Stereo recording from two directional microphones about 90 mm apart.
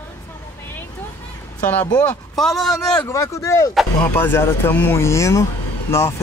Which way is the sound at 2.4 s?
5° left (ahead or behind).